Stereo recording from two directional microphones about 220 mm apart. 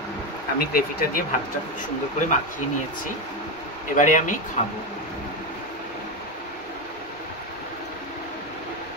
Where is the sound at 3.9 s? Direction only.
35° left (ahead or behind).